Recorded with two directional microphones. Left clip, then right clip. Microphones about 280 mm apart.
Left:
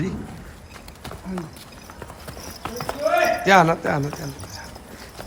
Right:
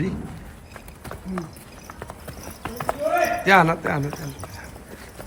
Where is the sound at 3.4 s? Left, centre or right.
Centre.